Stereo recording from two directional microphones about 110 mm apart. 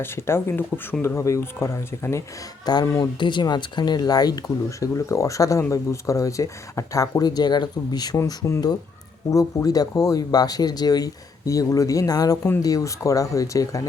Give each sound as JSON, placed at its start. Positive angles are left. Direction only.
{"t": 0.0, "sound": "speech", "side_deg": 20}
{"t": 3.0, "sound": "speech", "side_deg": 45}